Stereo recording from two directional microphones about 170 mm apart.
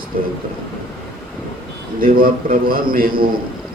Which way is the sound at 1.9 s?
60° right (ahead or behind).